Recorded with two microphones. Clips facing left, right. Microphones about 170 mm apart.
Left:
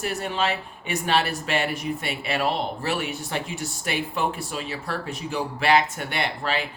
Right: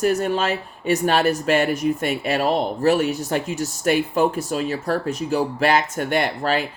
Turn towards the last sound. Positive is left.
turn(degrees=-45)  # may be behind; listen again after turning